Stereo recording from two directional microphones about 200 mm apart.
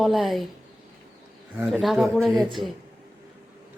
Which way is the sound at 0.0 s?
Centre (ahead or behind).